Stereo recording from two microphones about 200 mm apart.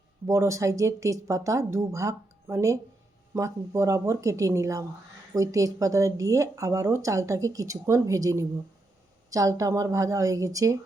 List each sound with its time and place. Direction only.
0.3 s speech: 15° right (ahead or behind)